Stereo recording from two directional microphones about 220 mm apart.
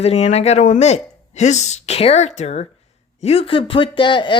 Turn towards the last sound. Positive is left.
turn(degrees=20)  # may be behind; listen again after turning